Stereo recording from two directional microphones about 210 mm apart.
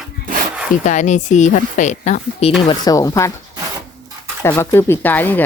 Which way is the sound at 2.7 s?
15° left (ahead or behind).